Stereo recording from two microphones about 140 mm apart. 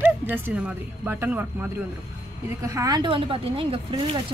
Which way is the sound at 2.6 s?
25° right (ahead or behind).